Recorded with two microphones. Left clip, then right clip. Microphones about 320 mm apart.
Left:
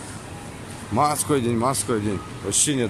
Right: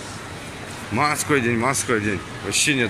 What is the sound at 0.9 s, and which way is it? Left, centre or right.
Speech, centre.